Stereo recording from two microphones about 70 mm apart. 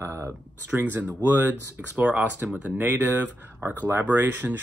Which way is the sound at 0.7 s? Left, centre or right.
Right.